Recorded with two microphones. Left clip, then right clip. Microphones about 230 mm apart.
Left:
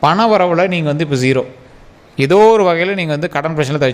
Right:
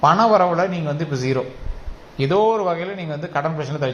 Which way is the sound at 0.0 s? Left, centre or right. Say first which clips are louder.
Left 3 dB; left.